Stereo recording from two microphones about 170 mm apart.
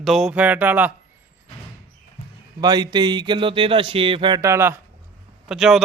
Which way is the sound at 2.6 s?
25° right (ahead or behind).